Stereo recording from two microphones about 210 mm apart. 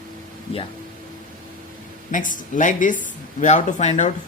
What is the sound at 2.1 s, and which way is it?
Speech, 40° left (ahead or behind).